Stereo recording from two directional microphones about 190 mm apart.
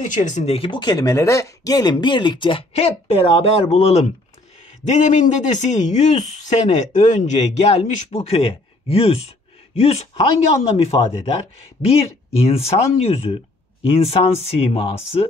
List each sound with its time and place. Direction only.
0.0 s speech: 40° left (ahead or behind)